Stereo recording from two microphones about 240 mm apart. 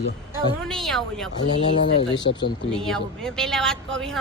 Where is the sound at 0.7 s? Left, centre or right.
Centre.